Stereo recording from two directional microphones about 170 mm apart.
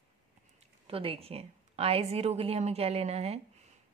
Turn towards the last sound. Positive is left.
turn(degrees=-35)  # may be behind; listen again after turning